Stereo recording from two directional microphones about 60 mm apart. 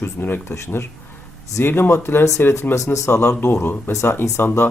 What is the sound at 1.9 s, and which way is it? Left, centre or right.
Speech, left.